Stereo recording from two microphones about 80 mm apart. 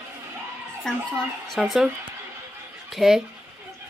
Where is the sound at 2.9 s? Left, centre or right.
Centre.